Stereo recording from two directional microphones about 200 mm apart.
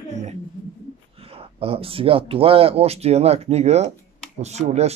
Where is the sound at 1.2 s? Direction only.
30° right (ahead or behind).